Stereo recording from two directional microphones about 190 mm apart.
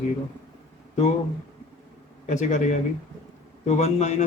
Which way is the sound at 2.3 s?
40° left (ahead or behind).